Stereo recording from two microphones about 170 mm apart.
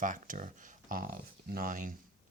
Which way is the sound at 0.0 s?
50° right (ahead or behind).